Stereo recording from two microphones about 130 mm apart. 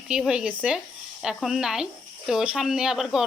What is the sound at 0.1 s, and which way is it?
Speech, 5° right (ahead or behind).